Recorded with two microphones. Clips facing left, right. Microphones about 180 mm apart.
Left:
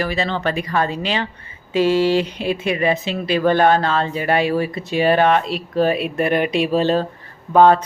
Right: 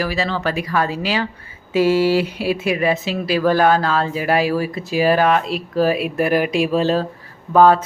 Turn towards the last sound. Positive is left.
turn(degrees=-5)  # may be behind; listen again after turning